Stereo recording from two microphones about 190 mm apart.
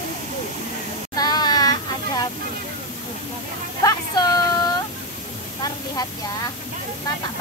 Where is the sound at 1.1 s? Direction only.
20° left (ahead or behind).